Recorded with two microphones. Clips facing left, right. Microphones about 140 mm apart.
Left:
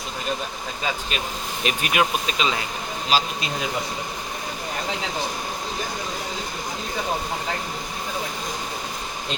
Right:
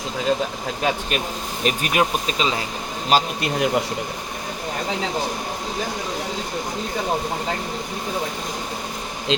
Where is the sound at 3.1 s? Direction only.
60° right (ahead or behind).